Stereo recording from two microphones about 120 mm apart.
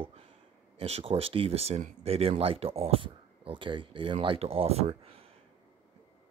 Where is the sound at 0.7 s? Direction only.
55° right (ahead or behind).